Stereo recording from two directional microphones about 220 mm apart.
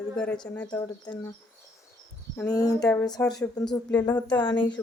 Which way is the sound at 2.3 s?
10° left (ahead or behind).